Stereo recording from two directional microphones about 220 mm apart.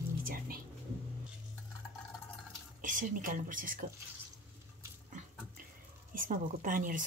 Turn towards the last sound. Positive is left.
turn(degrees=-35)  # may be behind; listen again after turning